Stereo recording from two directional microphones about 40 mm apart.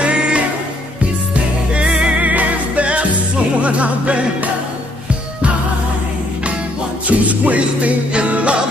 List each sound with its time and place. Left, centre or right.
0.0 s music: right
2.2 s music: right
7.1 s music: right